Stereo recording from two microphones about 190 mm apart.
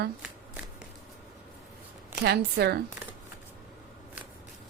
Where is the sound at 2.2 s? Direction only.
60° right (ahead or behind).